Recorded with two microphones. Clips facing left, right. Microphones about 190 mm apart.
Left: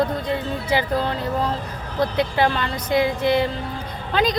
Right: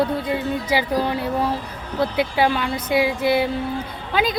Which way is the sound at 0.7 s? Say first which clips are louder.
Left 1 dB; 10° right (ahead or behind).